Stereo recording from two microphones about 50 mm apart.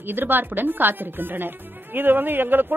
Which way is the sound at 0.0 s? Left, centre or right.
Right.